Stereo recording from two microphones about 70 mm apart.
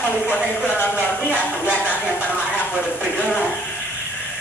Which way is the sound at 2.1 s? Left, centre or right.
Left.